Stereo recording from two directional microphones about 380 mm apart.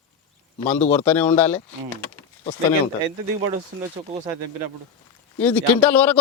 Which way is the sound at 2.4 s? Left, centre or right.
Centre.